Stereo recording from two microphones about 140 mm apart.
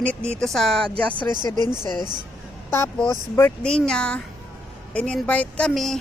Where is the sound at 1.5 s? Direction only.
30° right (ahead or behind).